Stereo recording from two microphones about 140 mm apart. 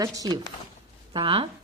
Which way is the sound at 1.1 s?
40° right (ahead or behind).